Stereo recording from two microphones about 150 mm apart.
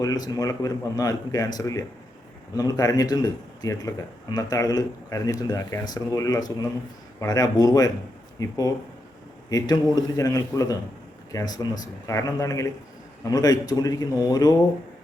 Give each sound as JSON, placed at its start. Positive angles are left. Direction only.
{"t": 0.0, "sound": "speech", "side_deg": 25}